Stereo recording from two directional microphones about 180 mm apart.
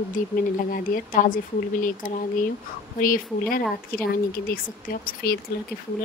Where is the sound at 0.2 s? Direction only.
45° left (ahead or behind).